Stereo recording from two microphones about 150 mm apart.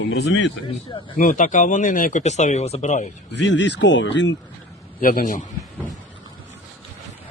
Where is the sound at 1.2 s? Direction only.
60° left (ahead or behind).